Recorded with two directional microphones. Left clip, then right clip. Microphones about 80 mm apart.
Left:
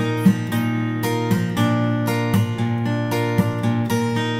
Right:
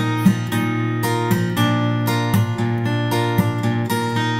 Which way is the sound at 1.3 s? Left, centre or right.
Right.